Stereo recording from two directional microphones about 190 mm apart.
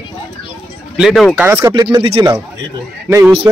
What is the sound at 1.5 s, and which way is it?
Speech, 10° right (ahead or behind).